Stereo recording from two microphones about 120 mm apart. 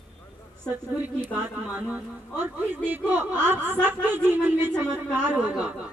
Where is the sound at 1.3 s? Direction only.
15° right (ahead or behind).